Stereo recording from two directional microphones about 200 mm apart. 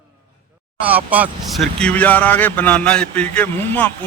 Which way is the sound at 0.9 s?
10° right (ahead or behind).